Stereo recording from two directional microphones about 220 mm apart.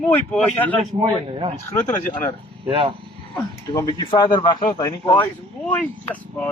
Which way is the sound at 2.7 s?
25° right (ahead or behind).